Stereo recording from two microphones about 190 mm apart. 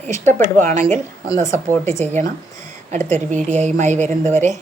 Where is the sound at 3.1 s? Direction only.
40° right (ahead or behind).